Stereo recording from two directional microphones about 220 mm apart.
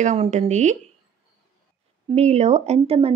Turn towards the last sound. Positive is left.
turn(degrees=-30)  # may be behind; listen again after turning